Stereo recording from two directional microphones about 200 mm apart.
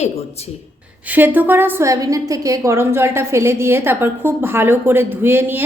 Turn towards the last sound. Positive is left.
turn(degrees=-10)  # may be behind; listen again after turning